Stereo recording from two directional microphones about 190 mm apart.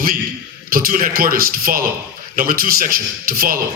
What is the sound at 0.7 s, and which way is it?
A man's voice, 50° right (ahead or behind).